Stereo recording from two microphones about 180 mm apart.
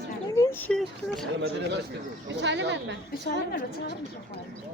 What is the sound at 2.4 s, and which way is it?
Speech, 80° right.